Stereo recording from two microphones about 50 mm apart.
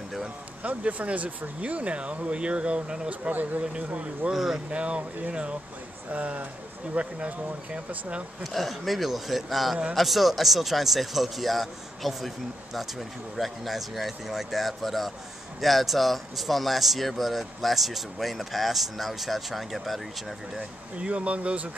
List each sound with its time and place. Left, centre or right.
0.6 s speech: right
4.3 s speech: centre
4.6 s speech: right
8.5 s speech: centre
13.4 s speech: centre
21.0 s speech: right